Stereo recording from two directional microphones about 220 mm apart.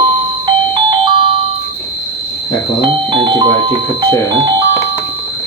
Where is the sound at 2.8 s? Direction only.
20° right (ahead or behind).